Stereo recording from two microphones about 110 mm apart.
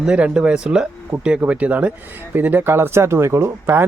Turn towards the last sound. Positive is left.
turn(degrees=-25)  # may be behind; listen again after turning